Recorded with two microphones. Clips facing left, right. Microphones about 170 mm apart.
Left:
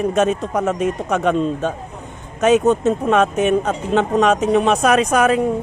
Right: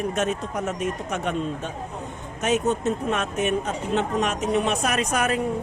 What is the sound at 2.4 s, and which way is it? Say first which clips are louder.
A man's voice: left 9 dB; 90° left.